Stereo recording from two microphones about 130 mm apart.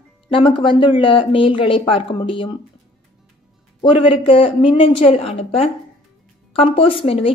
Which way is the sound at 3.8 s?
45° left (ahead or behind).